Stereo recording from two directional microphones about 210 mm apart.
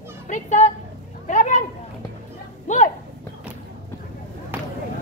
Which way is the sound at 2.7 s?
35° left (ahead or behind).